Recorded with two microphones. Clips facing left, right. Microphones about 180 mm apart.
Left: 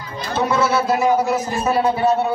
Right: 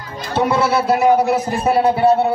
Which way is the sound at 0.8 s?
65° right (ahead or behind).